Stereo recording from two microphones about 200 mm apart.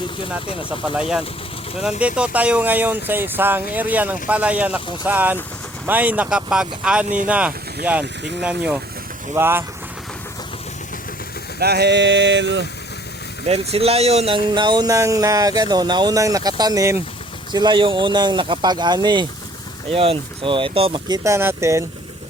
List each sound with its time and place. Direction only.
0.9 s speech: 5° right (ahead or behind)
11.6 s a sound: 55° right (ahead or behind)
13.5 s speech: 30° right (ahead or behind); by 21.8 s 15° right (ahead or behind)